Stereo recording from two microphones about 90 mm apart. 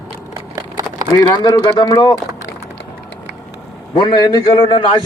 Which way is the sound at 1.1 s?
45° left (ahead or behind).